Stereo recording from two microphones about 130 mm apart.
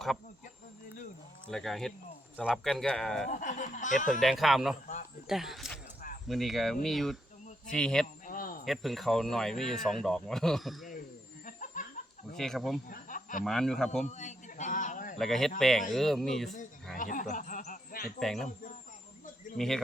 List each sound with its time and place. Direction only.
1.5 s speech: 5° left (ahead or behind)
3.2 s speech: 80° left
4.2 s speech: centre (ahead or behind)
8.3 s cricket: 90° left
8.6 s speech: centre (ahead or behind)
11.4 s a sound: 90° left
12.4 s speech: centre (ahead or behind)
12.9 s a sound: 90° left
13.4 s speech: 5° left (ahead or behind)
14.0 s a sound: 65° left (ahead or behind); by 15.2 s 85° left
15.2 s speech: centre (ahead or behind)
17.0 s a sound: 85° left
18.2 s speech: centre (ahead or behind)
19.5 s speech: 5° left (ahead or behind)